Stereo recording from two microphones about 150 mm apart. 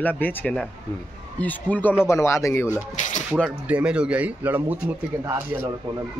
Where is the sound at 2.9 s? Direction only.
55° left (ahead or behind).